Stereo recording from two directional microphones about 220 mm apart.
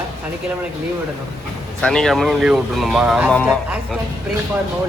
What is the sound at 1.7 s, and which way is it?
Speech, 5° left (ahead or behind).